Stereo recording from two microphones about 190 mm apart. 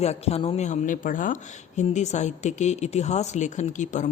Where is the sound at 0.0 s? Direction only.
35° left (ahead or behind).